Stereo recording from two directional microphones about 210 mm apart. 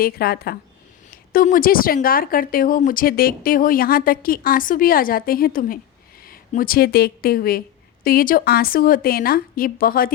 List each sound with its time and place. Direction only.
0.0 s a woman's voice: 45° left (ahead or behind)